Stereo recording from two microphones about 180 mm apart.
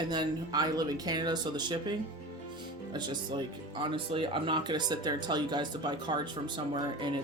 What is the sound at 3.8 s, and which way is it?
Speech, 25° right (ahead or behind).